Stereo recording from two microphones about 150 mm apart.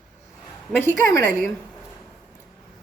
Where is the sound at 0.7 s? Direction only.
15° left (ahead or behind).